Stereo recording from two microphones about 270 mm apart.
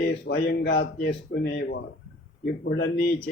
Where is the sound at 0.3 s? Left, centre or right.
Left.